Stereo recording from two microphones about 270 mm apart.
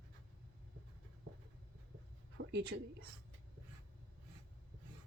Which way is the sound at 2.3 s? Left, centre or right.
Right.